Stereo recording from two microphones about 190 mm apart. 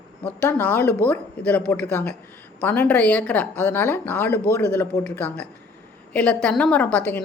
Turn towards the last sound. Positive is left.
turn(degrees=10)  # may be behind; listen again after turning